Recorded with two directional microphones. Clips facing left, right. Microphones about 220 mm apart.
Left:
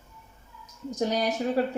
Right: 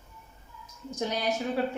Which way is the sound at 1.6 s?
40° left (ahead or behind).